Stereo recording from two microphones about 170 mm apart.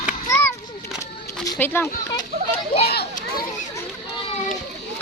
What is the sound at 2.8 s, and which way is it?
Children playing, 70° left (ahead or behind).